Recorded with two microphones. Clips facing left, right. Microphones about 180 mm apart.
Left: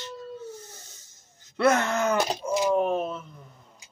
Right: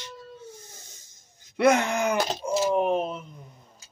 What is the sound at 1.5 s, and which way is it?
Speech, 15° right (ahead or behind).